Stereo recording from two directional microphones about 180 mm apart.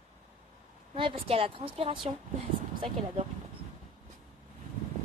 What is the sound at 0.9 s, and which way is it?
A woman's voice, 30° right (ahead or behind).